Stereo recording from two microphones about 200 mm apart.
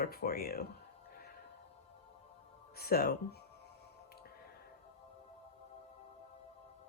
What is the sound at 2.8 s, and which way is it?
Speech, 50° left (ahead or behind).